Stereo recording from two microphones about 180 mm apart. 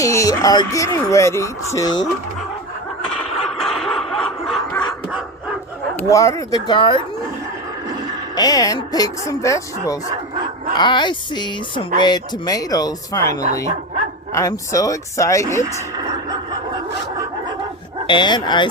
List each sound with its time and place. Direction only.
0.0 s speech: 20° left (ahead or behind)
3.2 s a sound: centre (ahead or behind)
6.1 s speech: 15° left (ahead or behind)
8.4 s speech: 20° left (ahead or behind)
14.3 s speech: 15° left (ahead or behind)
18.1 s speech: 25° left (ahead or behind)